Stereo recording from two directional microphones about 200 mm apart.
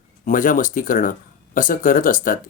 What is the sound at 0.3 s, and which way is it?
Speech, 40° left (ahead or behind).